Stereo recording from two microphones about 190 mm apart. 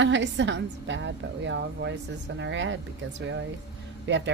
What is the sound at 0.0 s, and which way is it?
A woman's voice, 70° right (ahead or behind).